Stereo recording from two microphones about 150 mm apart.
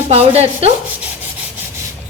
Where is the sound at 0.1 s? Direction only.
40° right (ahead or behind).